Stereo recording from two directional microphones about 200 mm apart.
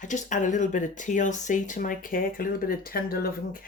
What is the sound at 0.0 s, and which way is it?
Speech, 40° left (ahead or behind).